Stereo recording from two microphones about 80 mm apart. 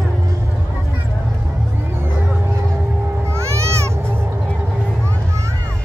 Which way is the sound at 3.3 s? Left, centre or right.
Right.